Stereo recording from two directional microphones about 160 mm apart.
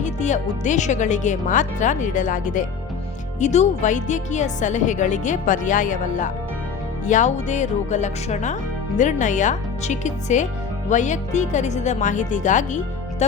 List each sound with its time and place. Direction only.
0.0 s speech: 50° left (ahead or behind)